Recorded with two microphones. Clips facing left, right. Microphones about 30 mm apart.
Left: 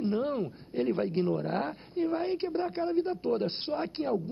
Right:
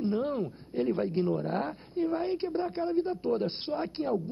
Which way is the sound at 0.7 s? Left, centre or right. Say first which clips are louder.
Even; left.